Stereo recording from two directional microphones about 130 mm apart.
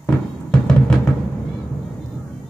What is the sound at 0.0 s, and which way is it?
Music, 5° left (ahead or behind).